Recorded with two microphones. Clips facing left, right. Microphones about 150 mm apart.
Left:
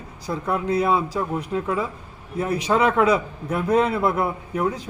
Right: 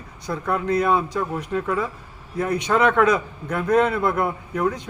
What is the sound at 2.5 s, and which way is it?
Speech, 30° left (ahead or behind).